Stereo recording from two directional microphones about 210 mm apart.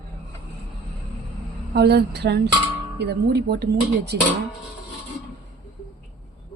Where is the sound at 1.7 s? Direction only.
50° right (ahead or behind).